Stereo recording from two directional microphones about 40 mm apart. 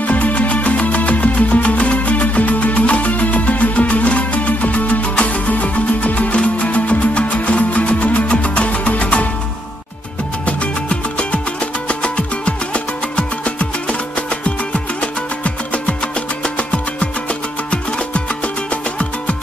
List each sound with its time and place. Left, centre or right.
0.0 s music: left
10.4 s music: left